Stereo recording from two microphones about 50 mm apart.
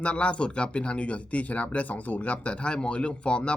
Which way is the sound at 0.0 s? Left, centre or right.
Left.